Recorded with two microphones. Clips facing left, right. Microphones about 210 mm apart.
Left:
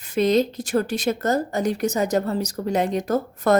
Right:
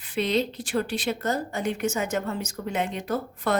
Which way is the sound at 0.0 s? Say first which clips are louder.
Left 6 dB; 45° left (ahead or behind).